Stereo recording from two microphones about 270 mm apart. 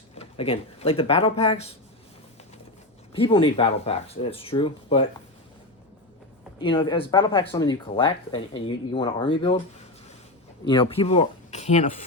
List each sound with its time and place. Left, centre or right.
0.2 s speech: left
3.1 s speech: centre
6.6 s speech: centre
10.7 s speech: centre